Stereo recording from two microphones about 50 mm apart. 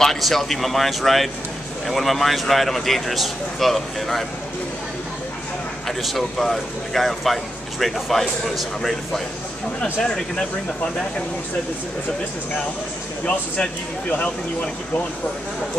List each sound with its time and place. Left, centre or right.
0.0 s speech: centre
5.9 s speech: centre
9.9 s speech: centre
13.2 s speech: left